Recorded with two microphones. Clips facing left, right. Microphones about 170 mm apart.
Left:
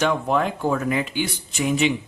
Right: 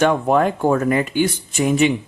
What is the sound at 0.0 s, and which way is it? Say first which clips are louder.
Speech: right 5 dB; 50° right (ahead or behind).